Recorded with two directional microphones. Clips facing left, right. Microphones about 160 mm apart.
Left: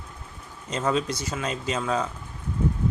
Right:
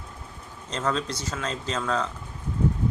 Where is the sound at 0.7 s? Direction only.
10° left (ahead or behind).